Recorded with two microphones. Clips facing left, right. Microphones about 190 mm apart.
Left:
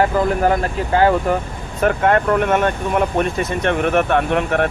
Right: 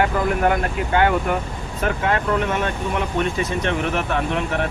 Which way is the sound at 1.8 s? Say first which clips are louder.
Left 6 dB; 50° left (ahead or behind).